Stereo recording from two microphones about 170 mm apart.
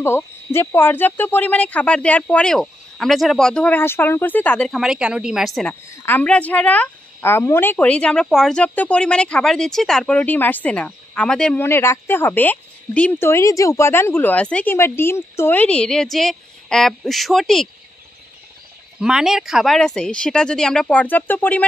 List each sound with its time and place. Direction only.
0.0 s a woman's voice: 15° left (ahead or behind)
18.9 s speech: 5° right (ahead or behind)